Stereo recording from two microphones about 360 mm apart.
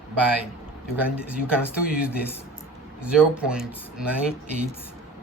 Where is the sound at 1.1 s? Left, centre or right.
Centre.